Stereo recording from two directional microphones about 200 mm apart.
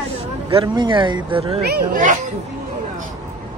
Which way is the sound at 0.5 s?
25° right (ahead or behind).